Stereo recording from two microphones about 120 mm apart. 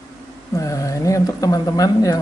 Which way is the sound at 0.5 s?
30° left (ahead or behind).